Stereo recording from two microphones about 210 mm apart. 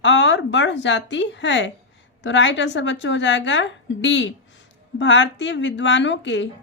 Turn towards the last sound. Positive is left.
turn(degrees=60)  # may be behind; listen again after turning